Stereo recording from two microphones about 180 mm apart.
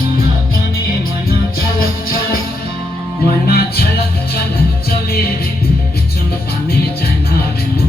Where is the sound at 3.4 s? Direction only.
60° left (ahead or behind).